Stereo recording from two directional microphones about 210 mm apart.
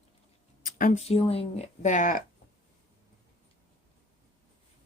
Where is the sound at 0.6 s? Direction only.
40° left (ahead or behind).